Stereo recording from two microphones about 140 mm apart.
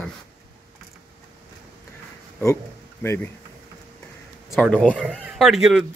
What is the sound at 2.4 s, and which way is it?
Speech, 20° left (ahead or behind).